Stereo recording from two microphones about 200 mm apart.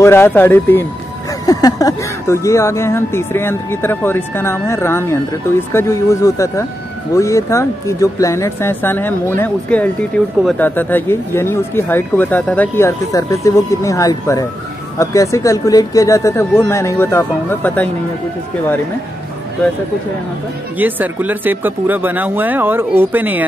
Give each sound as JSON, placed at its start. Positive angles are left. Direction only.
{"t": 0.0, "sound": "speech", "side_deg": 10}
{"t": 20.7, "sound": "speech", "side_deg": -10}